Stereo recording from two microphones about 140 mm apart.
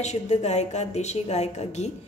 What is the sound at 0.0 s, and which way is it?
A woman's voice, 55° left (ahead or behind).